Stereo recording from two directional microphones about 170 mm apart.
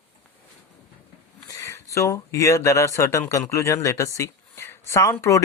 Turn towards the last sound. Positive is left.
turn(degrees=20)  # may be behind; listen again after turning